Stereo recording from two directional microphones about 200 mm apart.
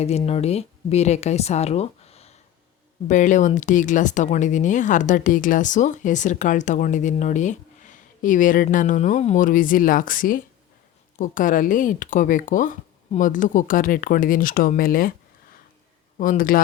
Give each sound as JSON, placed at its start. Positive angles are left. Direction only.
{"t": 0.0, "sound": "a woman's voice", "side_deg": 30}
{"t": 16.1, "sound": "speech", "side_deg": 40}